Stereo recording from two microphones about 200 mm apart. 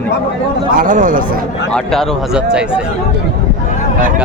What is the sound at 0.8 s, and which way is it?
Speech, 40° right (ahead or behind).